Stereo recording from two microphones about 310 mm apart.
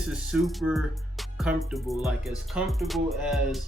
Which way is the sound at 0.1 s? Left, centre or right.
Centre.